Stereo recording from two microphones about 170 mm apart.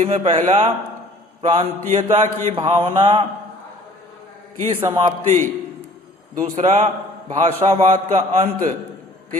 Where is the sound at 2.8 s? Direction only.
30° right (ahead or behind).